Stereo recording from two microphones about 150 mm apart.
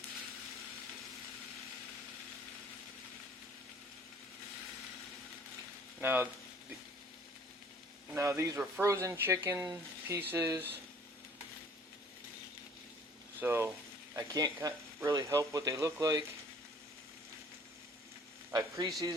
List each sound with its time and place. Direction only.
6.0 s speech: 15° right (ahead or behind)
8.1 s speech: 20° right (ahead or behind)
13.4 s speech: 15° right (ahead or behind)
14.2 s speech: 25° right (ahead or behind)
18.5 s speech: 25° right (ahead or behind)